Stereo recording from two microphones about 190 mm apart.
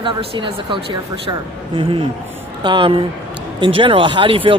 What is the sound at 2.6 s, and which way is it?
Speech, 25° right (ahead or behind).